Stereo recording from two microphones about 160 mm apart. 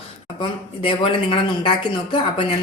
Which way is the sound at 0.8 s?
35° left (ahead or behind).